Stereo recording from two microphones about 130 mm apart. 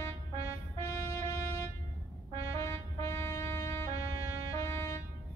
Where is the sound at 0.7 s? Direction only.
20° left (ahead or behind).